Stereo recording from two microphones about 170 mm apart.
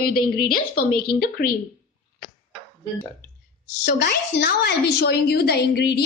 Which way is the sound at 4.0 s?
80° left.